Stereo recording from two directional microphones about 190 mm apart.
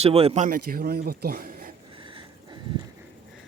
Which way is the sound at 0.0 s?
30° right (ahead or behind).